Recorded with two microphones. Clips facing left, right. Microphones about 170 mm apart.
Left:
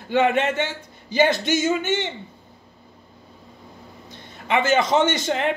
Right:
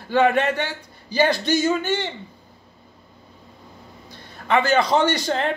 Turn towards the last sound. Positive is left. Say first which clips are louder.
# even
turn(degrees=15)  # may be behind; listen again after turning